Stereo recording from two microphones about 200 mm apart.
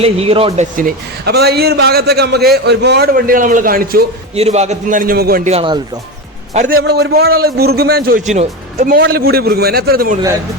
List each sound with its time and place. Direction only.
0.0 s a man's voice: 30° right (ahead or behind); by 4.0 s 45° right (ahead or behind)
4.4 s a man's voice: 35° right (ahead or behind); by 5.4 s 50° right (ahead or behind)
5.5 s speech: 25° right (ahead or behind)
6.5 s a man's voice: 40° right (ahead or behind)
8.3 s a man's voice: 40° right (ahead or behind)
9.0 s a man's voice: 50° right (ahead or behind)